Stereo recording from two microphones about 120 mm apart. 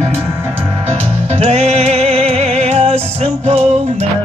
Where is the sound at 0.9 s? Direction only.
60° right (ahead or behind).